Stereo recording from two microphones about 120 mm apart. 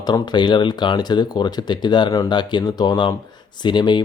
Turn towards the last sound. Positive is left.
turn(degrees=40)  # may be behind; listen again after turning